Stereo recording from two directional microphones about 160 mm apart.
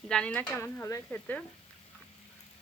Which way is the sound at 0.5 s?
15° left (ahead or behind).